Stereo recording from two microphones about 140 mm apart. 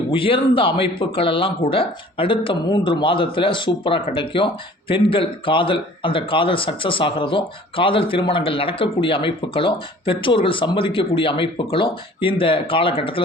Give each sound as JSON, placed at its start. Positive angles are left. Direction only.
{"t": 0.1, "sound": "speech", "side_deg": 40}